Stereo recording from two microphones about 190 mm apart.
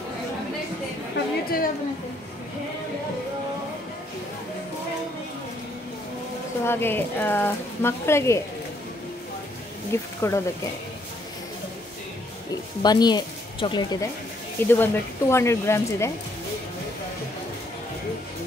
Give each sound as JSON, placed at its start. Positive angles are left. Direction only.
{"t": 1.1, "sound": "a sound", "side_deg": 50}
{"t": 6.6, "sound": "speech", "side_deg": 10}
{"t": 10.2, "sound": "speech", "side_deg": 15}
{"t": 12.8, "sound": "speech", "side_deg": 20}
{"t": 14.7, "sound": "speech", "side_deg": 10}